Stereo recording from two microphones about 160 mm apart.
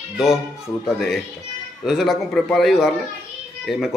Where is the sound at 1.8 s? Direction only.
Centre (ahead or behind).